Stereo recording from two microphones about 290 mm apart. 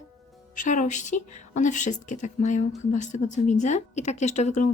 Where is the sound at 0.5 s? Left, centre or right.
Left.